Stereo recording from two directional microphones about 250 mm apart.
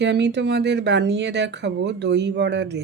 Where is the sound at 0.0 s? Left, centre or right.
Right.